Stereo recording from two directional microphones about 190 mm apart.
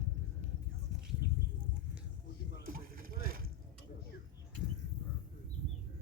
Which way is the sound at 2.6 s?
50° right (ahead or behind).